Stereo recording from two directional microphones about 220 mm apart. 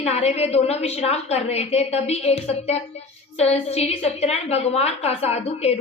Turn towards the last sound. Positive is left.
turn(degrees=30)  # may be behind; listen again after turning